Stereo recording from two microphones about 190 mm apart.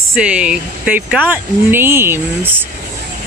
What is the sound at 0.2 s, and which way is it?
Speech, 5° right (ahead or behind).